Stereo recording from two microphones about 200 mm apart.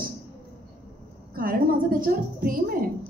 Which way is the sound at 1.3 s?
45° right (ahead or behind).